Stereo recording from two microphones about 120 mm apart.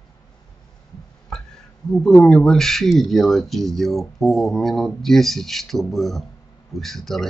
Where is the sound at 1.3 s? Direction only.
5° left (ahead or behind).